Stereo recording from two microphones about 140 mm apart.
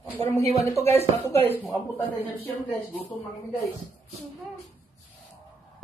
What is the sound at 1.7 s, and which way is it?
Speech, 35° left (ahead or behind).